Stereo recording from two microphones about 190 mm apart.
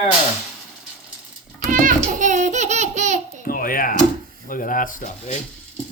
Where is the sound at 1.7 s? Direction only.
45° right (ahead or behind).